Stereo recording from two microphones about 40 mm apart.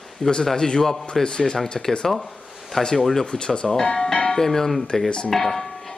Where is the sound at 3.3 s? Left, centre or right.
Centre.